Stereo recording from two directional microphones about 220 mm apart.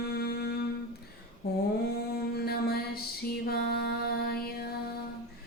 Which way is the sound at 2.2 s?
45° left (ahead or behind).